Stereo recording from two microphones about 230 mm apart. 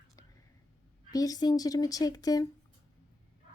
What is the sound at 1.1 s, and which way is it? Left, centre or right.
A woman's voice, centre.